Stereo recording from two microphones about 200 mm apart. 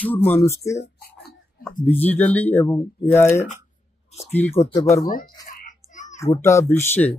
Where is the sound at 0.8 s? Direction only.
55° left (ahead or behind).